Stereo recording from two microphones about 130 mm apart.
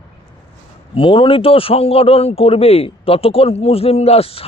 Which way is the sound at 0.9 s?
40° left (ahead or behind).